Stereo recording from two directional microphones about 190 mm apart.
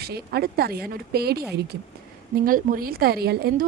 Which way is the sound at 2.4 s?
50° right (ahead or behind).